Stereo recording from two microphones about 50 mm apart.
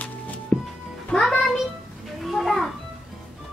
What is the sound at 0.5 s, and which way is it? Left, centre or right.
Music, left.